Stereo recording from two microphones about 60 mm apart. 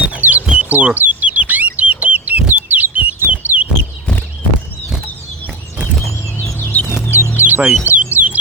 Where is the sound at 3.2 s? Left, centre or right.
Right.